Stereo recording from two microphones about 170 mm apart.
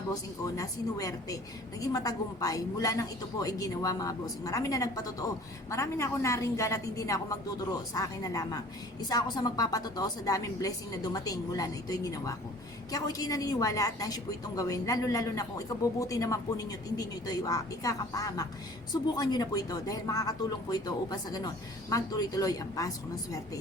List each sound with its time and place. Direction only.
0.1 s a woman's voice: 20° left (ahead or behind)